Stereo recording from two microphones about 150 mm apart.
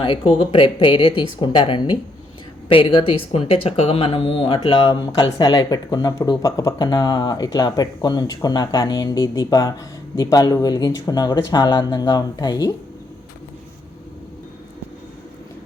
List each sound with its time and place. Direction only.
0.0 s speech: 30° left (ahead or behind)